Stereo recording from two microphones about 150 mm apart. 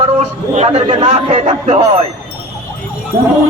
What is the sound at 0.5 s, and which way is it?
A man's voice, 50° right (ahead or behind).